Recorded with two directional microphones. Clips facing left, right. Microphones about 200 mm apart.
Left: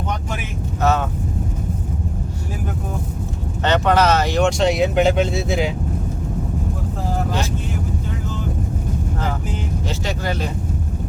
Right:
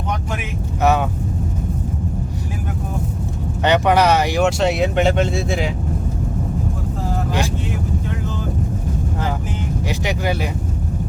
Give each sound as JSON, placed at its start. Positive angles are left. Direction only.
{"t": 0.8, "sound": "speech", "side_deg": -15}
{"t": 3.6, "sound": "speech", "side_deg": -15}